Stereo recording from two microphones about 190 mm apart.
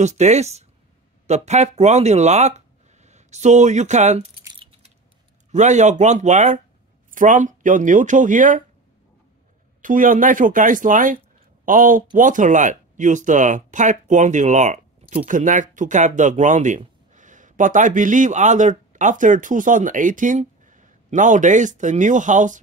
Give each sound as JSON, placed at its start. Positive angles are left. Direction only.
{"t": 0.0, "sound": "speech", "side_deg": -35}
{"t": 5.5, "sound": "speech", "side_deg": -40}
{"t": 9.8, "sound": "speech", "side_deg": -45}